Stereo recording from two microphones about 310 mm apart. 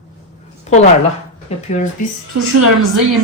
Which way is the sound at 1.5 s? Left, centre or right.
Left.